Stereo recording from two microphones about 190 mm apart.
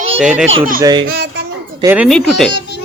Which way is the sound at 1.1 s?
65° right (ahead or behind).